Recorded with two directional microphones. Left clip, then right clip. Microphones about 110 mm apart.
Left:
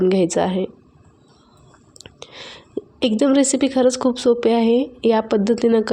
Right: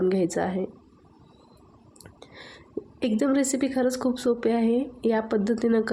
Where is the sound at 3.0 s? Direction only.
25° left (ahead or behind).